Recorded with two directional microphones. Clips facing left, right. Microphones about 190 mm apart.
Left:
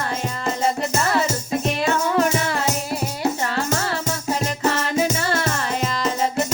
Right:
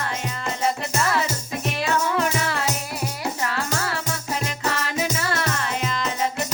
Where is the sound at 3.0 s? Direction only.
25° left (ahead or behind).